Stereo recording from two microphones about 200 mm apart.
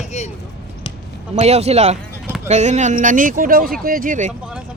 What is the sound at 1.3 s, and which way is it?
Speech, 35° right (ahead or behind).